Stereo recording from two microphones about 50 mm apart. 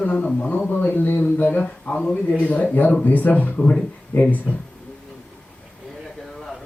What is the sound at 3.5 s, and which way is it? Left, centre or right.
Speech, left.